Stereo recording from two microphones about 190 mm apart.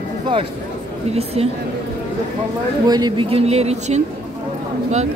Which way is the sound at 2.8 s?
20° right (ahead or behind).